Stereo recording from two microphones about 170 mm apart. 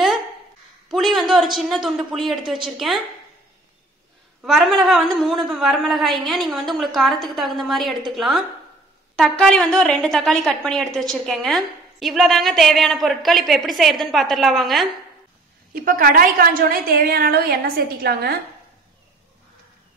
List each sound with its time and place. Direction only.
0.8 s speech: centre (ahead or behind)
4.4 s a woman's voice: centre (ahead or behind)
15.7 s a woman's voice: 55° right (ahead or behind)